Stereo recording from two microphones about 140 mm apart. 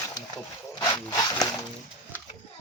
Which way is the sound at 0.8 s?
25° left (ahead or behind).